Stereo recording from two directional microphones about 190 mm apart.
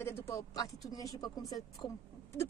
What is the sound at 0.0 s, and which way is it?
A woman's voice, 10° left (ahead or behind).